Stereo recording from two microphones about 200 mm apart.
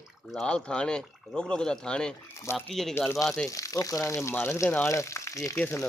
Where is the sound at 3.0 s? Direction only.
10° left (ahead or behind).